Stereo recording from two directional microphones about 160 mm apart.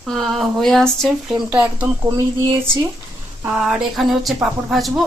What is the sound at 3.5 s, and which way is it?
Speech, centre (ahead or behind).